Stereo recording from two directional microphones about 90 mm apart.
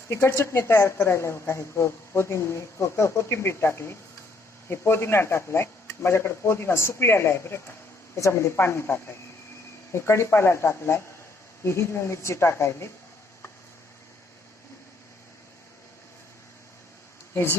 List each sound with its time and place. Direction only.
0.1 s a woman's voice: 30° left (ahead or behind)
17.3 s speech: 25° left (ahead or behind)